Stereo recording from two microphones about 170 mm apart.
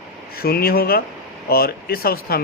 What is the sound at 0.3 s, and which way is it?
Speech, 65° left (ahead or behind).